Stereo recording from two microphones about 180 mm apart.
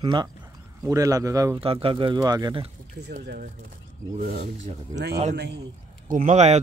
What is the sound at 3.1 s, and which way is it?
A man's voice, 50° right (ahead or behind).